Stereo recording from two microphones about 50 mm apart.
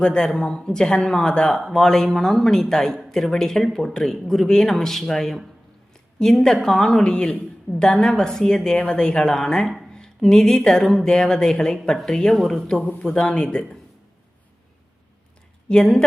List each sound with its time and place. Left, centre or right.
0.0 s speech: centre
8.7 s speech: left
15.7 s speech: centre